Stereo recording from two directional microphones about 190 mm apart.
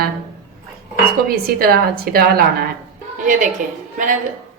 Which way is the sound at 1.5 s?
50° right (ahead or behind).